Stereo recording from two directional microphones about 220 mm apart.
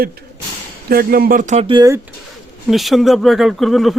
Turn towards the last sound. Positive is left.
turn(degrees=0)  # may be behind; listen again after turning